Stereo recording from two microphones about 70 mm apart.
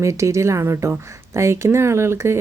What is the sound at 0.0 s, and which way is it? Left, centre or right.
Speech, right.